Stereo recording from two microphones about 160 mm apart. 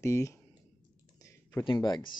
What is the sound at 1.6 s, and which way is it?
Speech, 30° left (ahead or behind).